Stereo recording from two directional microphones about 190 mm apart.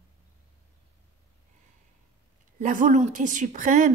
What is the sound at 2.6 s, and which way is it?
A woman's voice, 40° right (ahead or behind).